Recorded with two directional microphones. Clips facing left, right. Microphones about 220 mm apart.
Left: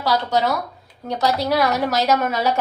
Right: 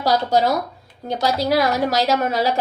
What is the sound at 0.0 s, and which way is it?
Speech, 45° right (ahead or behind).